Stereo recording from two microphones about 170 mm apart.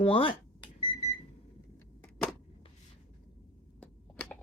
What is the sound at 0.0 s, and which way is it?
Speech, 30° left (ahead or behind).